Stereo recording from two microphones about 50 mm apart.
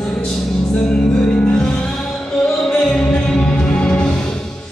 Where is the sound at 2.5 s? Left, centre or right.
Centre.